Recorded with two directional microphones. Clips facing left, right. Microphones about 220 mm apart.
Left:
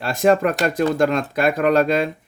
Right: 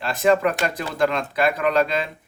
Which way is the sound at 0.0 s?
45° left (ahead or behind).